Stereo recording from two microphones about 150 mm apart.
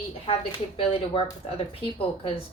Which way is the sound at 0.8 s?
35° left (ahead or behind).